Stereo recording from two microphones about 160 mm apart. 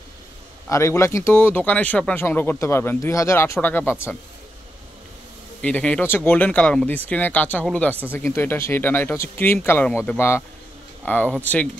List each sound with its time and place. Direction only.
0.7 s speech: 15° left (ahead or behind)
5.6 s speech: 10° left (ahead or behind)